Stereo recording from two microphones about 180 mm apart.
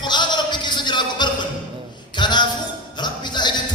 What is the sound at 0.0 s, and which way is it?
Music, 25° left (ahead or behind).